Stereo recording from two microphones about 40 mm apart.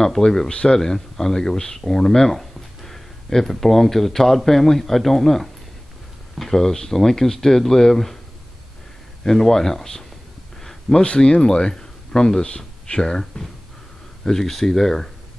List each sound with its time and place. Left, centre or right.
0.0 s speech: centre
0.5 s speech: left
0.7 s speech: centre
9.2 s speech: centre
10.6 s a sound: centre
11.0 s speech: left
14.2 s speech: centre